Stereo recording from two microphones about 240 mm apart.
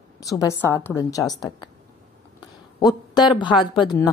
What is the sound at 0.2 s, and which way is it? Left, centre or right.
A woman's voice, centre.